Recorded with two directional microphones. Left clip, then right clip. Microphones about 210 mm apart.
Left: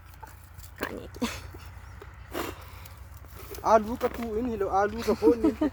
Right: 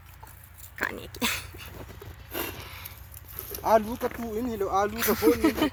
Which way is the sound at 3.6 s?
20° right (ahead or behind).